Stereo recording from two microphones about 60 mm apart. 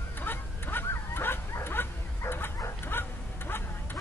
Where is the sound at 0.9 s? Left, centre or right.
Left.